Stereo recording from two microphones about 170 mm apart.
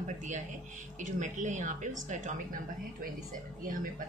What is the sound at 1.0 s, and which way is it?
A woman's voice, 45° right (ahead or behind).